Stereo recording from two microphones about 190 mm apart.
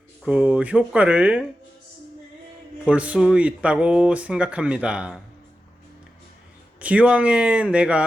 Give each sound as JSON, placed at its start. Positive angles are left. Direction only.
{"t": 0.3, "sound": "speech", "side_deg": -5}
{"t": 2.8, "sound": "speech", "side_deg": -5}
{"t": 6.7, "sound": "speech", "side_deg": -5}